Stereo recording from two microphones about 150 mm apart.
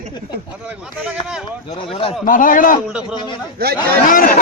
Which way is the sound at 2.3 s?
65° left (ahead or behind).